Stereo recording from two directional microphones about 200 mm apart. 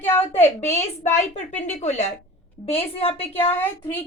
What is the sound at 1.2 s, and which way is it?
A woman's voice, 35° left (ahead or behind).